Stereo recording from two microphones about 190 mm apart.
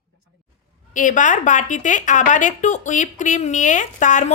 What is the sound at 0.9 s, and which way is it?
A woman's voice, 45° left (ahead or behind).